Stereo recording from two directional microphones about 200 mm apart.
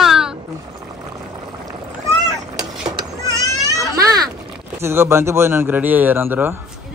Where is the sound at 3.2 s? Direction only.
15° right (ahead or behind).